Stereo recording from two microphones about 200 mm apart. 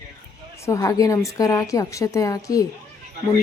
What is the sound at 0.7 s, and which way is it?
Speech, 15° left (ahead or behind).